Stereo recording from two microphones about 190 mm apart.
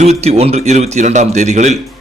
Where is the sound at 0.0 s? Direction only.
35° right (ahead or behind).